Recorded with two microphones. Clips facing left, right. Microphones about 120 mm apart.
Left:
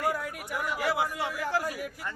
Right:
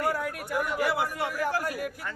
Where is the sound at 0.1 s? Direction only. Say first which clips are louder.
Right 2 dB; 15° left (ahead or behind).